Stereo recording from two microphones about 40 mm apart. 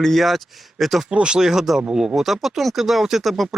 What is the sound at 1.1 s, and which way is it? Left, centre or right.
Speech, right.